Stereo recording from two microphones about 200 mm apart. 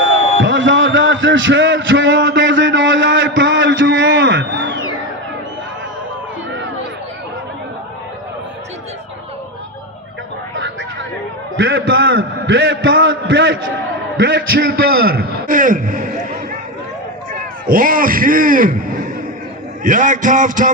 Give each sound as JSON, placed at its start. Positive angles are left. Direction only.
{"t": 0.4, "sound": "a sound", "side_deg": -70}
{"t": 11.5, "sound": "a man's voice", "side_deg": -70}
{"t": 19.8, "sound": "music", "side_deg": -40}